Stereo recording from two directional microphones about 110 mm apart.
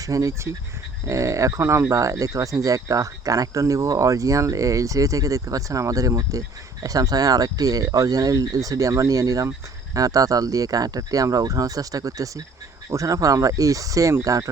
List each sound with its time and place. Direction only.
0.0 s speech: 30° right (ahead or behind)